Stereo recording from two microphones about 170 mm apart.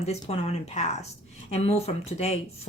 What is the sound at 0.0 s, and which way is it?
Speech, 40° left (ahead or behind).